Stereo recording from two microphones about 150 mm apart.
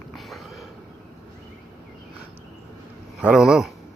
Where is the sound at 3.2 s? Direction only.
5° right (ahead or behind).